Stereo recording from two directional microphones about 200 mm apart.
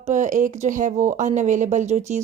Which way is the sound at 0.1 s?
40° right (ahead or behind).